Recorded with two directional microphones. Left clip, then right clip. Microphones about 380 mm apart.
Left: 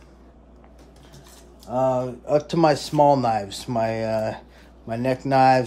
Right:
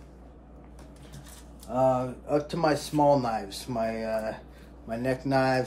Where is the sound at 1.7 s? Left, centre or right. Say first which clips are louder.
Left 3 dB; left.